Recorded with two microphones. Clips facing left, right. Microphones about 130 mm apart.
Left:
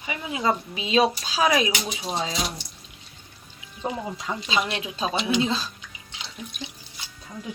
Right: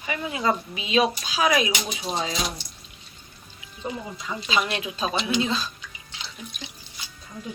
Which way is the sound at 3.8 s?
60° left (ahead or behind).